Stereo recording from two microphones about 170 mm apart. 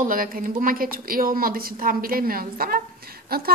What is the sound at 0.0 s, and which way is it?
A woman's voice, 55° right (ahead or behind).